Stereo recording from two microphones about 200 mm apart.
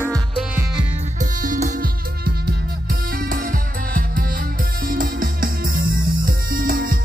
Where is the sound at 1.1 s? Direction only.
40° right (ahead or behind).